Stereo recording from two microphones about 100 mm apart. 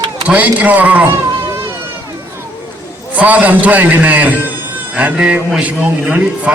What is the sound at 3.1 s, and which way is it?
A man's voice, 15° right (ahead or behind).